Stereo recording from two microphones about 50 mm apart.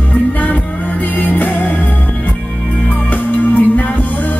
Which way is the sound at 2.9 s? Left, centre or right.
Left.